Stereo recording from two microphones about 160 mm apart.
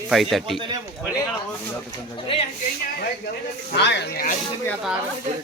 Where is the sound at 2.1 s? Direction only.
35° left (ahead or behind).